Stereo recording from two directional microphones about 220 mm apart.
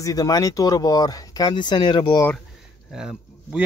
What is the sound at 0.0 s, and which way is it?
Speech, 15° left (ahead or behind).